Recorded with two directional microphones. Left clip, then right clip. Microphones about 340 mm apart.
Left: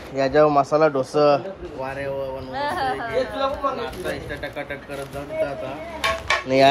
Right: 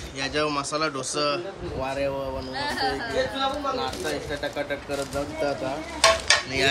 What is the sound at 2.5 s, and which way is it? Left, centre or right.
Speech, centre.